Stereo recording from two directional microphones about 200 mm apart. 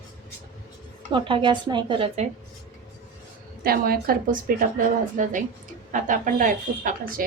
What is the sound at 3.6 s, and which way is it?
Speech, 45° right (ahead or behind).